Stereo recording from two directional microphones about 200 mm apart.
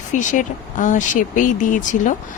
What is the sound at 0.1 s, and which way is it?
Speech, 40° left (ahead or behind).